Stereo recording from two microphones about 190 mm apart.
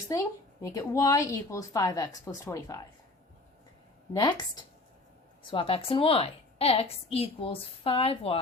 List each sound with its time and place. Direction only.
0.1 s a woman's voice: 15° left (ahead or behind)
5.5 s a woman's voice: 25° left (ahead or behind)